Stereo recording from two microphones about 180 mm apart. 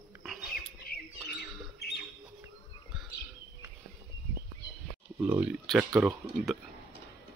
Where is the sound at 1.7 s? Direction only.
65° left (ahead or behind).